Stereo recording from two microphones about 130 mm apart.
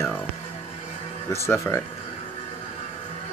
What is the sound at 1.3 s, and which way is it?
Speech, 20° left (ahead or behind).